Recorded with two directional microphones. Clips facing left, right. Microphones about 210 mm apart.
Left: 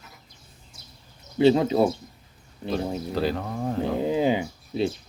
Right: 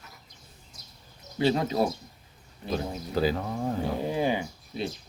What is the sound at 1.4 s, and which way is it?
Speech, 25° left (ahead or behind).